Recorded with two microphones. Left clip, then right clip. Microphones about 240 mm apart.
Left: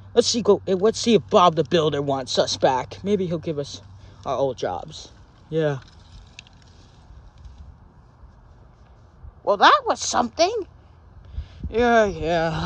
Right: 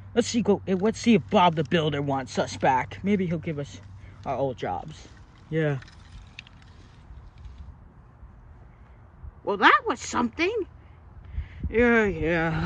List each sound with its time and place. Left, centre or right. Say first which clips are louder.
0.1 s speech: left 6 dB; centre
6.4 s vehicle: even; left
9.5 s speech: left 4 dB; centre